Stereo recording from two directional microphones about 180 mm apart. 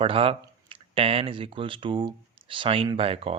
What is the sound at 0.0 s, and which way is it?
Speech, 30° right (ahead or behind).